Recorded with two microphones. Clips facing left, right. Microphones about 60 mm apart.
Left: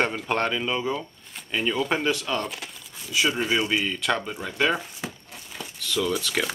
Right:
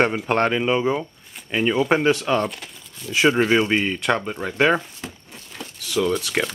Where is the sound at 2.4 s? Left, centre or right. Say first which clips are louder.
Right 6 dB; centre.